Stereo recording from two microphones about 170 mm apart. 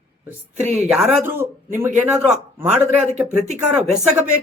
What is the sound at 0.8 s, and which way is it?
Speech, 5° right (ahead or behind).